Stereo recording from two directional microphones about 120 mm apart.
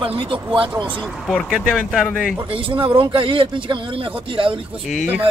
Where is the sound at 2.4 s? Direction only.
45° right (ahead or behind).